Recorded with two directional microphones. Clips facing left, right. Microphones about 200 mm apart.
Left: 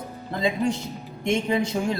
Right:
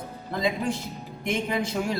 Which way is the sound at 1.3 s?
25° left (ahead or behind).